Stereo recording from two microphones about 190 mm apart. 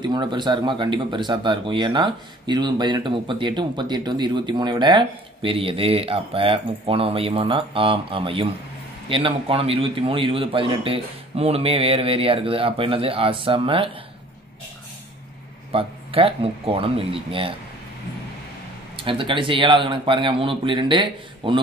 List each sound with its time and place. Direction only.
0.0 s speech: 25° right (ahead or behind)
15.7 s speech: 30° right (ahead or behind)
18.9 s speech: 25° right (ahead or behind)